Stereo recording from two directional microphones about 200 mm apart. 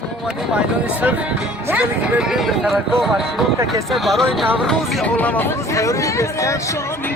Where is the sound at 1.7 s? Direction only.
5° right (ahead or behind); by 6.5 s 15° left (ahead or behind).